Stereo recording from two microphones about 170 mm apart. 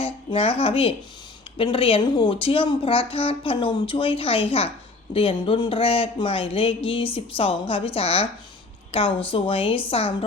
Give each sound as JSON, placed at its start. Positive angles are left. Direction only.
{"t": 0.0, "sound": "speech", "side_deg": 35}